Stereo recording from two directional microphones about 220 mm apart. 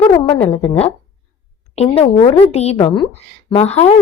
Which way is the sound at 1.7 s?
30° left (ahead or behind).